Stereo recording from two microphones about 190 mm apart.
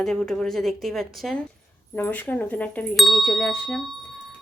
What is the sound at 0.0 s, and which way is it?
Speech, 5° left (ahead or behind).